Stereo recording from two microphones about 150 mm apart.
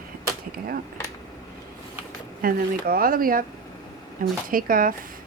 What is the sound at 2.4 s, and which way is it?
Speech, 80° right.